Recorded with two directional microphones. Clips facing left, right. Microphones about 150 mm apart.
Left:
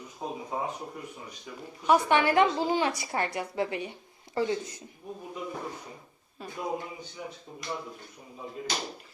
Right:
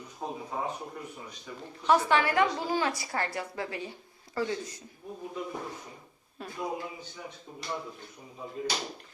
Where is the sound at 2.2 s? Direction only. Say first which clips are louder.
Left 3 dB; 25° left (ahead or behind).